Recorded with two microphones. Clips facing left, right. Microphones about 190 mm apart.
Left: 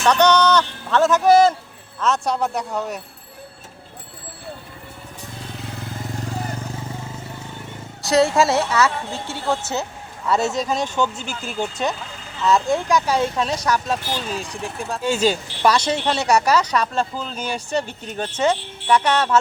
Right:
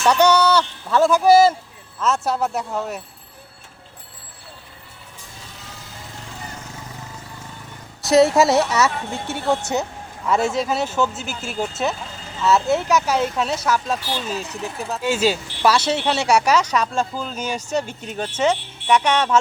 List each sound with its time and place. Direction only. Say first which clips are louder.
0.0 s speech: even; 10° right (ahead or behind)
8.1 s a woman's voice: right 3 dB; 20° right (ahead or behind)
10.2 s speech: right 1 dB; 10° right (ahead or behind)